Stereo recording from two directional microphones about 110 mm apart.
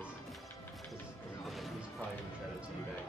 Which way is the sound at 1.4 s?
Centre (ahead or behind).